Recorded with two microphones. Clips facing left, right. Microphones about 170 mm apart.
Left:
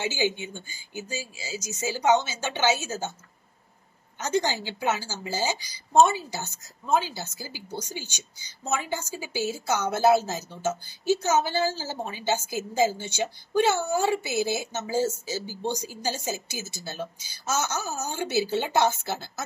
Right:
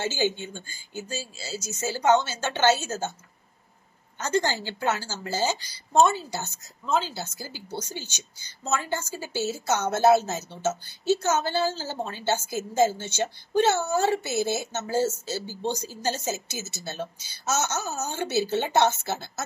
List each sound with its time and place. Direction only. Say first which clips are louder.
0.0 s a woman's voice: right 1 dB; 15° left (ahead or behind)
4.2 s a woman's voice: even; 15° left (ahead or behind)
6.3 s a woman's voice: right 2 dB; 65° right (ahead or behind)
6.8 s a woman's voice: left 1 dB; 15° left (ahead or behind)
7.1 s a woman's voice: right 2 dB; 60° right (ahead or behind)
7.4 s a woman's voice: right 1 dB; 10° left (ahead or behind)